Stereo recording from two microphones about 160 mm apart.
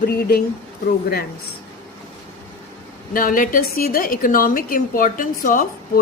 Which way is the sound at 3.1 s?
60° left (ahead or behind).